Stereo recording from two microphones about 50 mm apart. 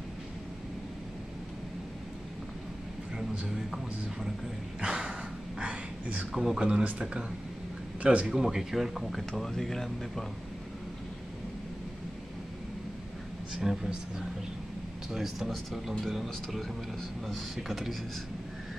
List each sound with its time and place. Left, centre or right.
4.7 s music: centre
5.6 s whispering: right
6.3 s a woman's voice: centre; by 8.3 s right
8.3 s a woman's voice: centre
13.6 s a woman's voice: centre
15.9 s speech: centre
17.3 s speech: centre